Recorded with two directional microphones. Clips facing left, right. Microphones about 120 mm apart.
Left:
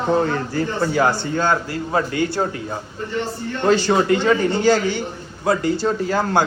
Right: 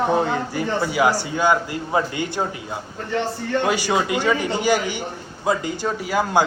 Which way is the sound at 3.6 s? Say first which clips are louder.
Left 6 dB; 10° right (ahead or behind).